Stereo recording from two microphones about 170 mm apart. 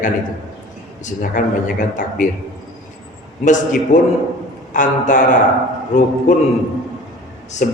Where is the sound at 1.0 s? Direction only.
50° left (ahead or behind).